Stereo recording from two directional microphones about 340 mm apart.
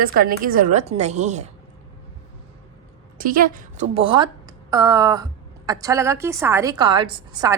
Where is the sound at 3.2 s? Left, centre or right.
Right.